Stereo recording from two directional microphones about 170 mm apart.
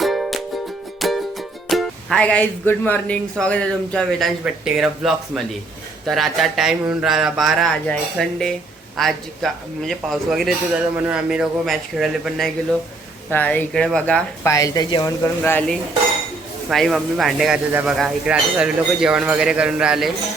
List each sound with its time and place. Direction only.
0.0 s music: centre (ahead or behind)
0.9 s speech: centre (ahead or behind)
13.3 s speech: 10° left (ahead or behind)
14.5 s speech: 20° left (ahead or behind); by 20.1 s 5° right (ahead or behind)